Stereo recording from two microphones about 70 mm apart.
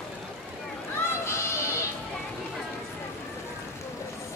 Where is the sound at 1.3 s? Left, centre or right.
Left.